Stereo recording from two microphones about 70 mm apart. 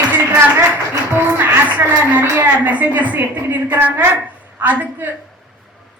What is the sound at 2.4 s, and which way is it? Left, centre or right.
A woman's voice, right.